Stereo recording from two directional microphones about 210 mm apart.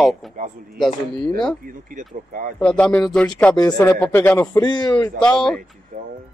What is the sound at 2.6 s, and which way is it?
Speech, 5° left (ahead or behind).